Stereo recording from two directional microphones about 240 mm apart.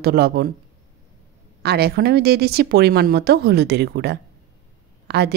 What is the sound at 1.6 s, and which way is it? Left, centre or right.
A woman's voice, right.